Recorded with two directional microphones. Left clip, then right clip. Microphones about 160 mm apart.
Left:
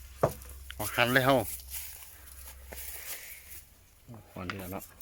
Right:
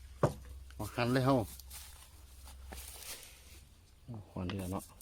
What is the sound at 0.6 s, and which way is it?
Speech, 5° left (ahead or behind).